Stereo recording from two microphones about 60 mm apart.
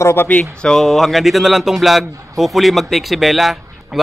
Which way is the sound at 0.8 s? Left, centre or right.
Centre.